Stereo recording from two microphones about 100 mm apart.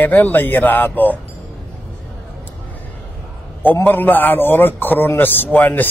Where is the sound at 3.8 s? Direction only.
20° left (ahead or behind).